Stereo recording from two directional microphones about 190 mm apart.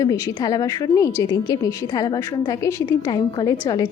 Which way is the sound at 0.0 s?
15° left (ahead or behind).